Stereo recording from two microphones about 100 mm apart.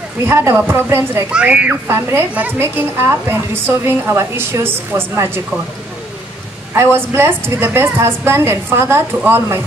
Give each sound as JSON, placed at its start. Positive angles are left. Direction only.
{"t": 0.2, "sound": "a woman's voice", "side_deg": -25}
{"t": 1.3, "sound": "a woman's voice", "side_deg": -10}
{"t": 1.9, "sound": "a woman's voice", "side_deg": -25}
{"t": 6.7, "sound": "a woman's voice", "side_deg": -25}